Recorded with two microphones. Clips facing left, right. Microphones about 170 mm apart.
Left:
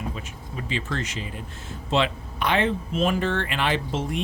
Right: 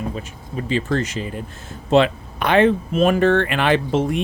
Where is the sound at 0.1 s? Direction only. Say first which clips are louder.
Right 6 dB; 40° right (ahead or behind).